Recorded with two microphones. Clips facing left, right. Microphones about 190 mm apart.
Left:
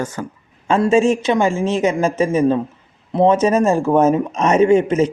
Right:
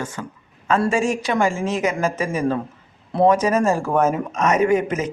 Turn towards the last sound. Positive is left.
turn(degrees=25)  # may be behind; listen again after turning